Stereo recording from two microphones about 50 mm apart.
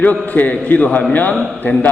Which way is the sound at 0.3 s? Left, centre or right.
Left.